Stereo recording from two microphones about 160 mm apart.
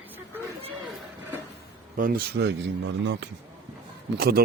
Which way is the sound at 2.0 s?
65° right (ahead or behind).